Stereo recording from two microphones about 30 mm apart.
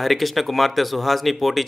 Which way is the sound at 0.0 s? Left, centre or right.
Centre.